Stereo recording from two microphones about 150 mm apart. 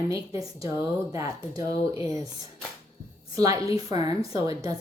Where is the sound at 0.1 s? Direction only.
25° right (ahead or behind).